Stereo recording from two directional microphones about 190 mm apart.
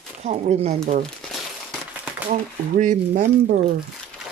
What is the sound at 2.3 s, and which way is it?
Speech, 40° right (ahead or behind).